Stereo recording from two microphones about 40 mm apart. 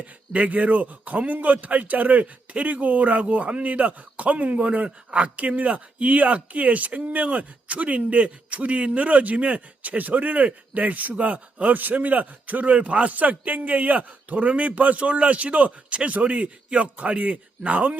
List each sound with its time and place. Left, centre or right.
0.0 s a man's voice: right